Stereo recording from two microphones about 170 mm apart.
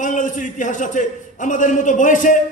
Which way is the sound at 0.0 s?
50° left (ahead or behind).